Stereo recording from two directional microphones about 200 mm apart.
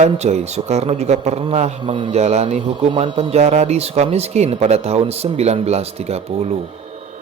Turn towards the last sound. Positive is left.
turn(degrees=-30)  # may be behind; listen again after turning